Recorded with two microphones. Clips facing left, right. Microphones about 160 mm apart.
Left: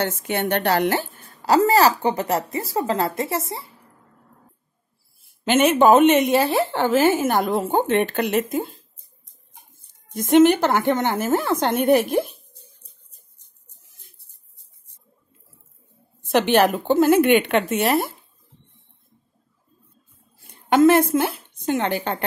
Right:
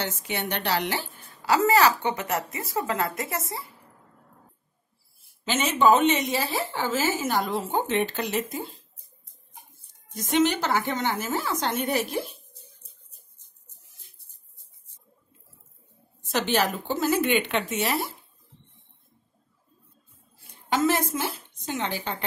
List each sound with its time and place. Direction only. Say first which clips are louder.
0.0 s a woman's voice: left 7 dB; 55° left (ahead or behind); by 3.6 s 30° left (ahead or behind)
5.4 s a woman's voice: left 6 dB; 60° left (ahead or behind)
10.1 s a woman's voice: left 9 dB; 55° left (ahead or behind)
16.3 s a woman's voice: left 8 dB; 60° left (ahead or behind)
20.7 s a woman's voice: left 9 dB; 60° left (ahead or behind)